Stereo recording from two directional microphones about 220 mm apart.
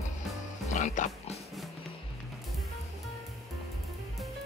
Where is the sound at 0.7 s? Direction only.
35° left (ahead or behind).